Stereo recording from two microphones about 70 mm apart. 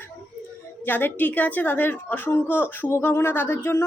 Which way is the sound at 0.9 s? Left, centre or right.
Left.